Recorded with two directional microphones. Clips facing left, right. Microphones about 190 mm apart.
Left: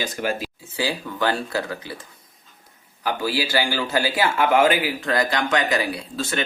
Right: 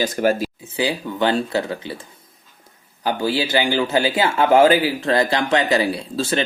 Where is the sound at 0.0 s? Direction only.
40° right (ahead or behind).